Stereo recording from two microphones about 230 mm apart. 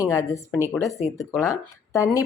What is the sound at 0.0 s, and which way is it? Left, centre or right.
Speech, centre.